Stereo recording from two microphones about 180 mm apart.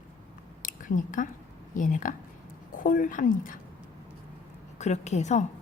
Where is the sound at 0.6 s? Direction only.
45° left (ahead or behind).